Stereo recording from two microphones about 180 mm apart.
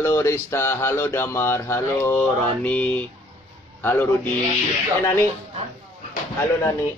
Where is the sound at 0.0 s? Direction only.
15° left (ahead or behind).